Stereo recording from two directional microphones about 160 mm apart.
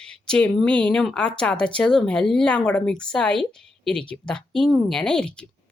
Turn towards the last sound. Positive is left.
turn(degrees=5)  # may be behind; listen again after turning